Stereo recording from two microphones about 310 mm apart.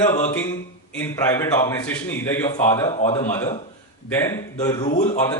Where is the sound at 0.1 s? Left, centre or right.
Centre.